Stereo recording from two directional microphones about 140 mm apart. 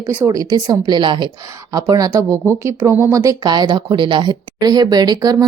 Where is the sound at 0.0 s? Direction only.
10° right (ahead or behind).